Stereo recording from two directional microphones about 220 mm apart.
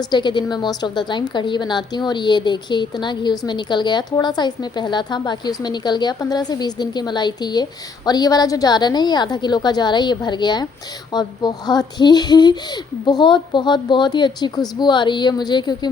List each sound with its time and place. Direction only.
0.1 s a woman's voice: 20° left (ahead or behind)